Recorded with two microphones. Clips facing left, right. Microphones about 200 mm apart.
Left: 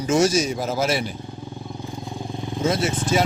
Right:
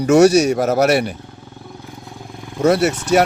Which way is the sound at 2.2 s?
25° left (ahead or behind).